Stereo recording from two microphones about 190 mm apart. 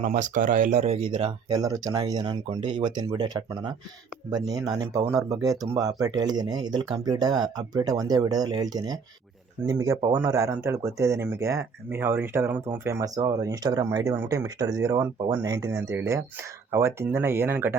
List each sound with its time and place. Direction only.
0.0 s speech: 40° right (ahead or behind); by 17.7 s 10° right (ahead or behind)